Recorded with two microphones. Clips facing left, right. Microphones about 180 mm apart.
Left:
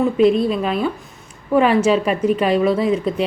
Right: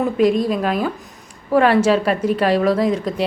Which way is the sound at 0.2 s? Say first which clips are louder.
Left 1 dB; 40° right (ahead or behind).